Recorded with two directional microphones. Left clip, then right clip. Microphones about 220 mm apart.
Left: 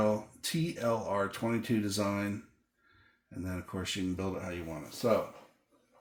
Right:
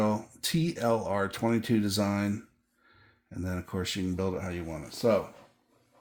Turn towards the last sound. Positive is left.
turn(degrees=-50)  # may be behind; listen again after turning